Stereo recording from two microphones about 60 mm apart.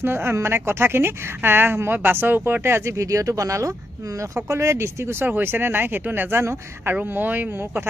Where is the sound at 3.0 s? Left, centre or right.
Right.